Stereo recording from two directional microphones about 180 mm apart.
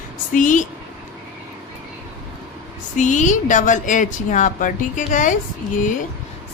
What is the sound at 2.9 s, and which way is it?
Speech, 45° left (ahead or behind).